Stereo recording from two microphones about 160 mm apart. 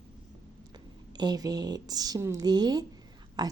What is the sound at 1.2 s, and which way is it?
Speech, 25° right (ahead or behind).